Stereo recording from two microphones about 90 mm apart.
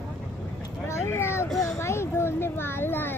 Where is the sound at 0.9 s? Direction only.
30° left (ahead or behind).